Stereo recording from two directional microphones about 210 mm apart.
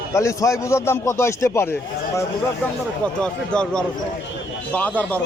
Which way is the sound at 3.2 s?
5° left (ahead or behind).